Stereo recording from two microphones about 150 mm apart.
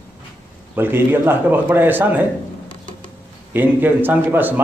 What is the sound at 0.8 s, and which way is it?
A man's voice, 15° right (ahead or behind).